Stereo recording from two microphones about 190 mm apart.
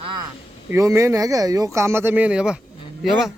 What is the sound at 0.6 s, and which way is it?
Speech, 15° right (ahead or behind).